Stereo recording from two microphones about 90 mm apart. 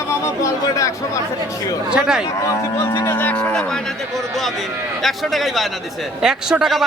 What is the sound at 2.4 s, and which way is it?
Speech, 35° left (ahead or behind).